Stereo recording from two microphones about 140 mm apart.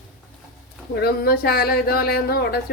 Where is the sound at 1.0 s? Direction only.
90° left.